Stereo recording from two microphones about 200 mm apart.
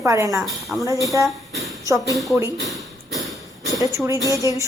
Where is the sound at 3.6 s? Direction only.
15° left (ahead or behind).